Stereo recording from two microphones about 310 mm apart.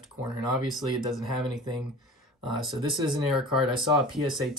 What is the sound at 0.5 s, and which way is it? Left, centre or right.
Speech, centre.